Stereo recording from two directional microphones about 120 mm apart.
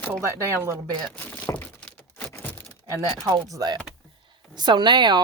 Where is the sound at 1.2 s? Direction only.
15° left (ahead or behind).